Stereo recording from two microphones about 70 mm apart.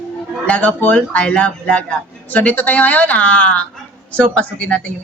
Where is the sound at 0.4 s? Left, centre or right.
Left.